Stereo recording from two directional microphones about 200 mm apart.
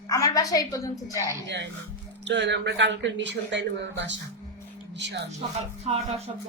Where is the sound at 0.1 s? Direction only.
20° left (ahead or behind).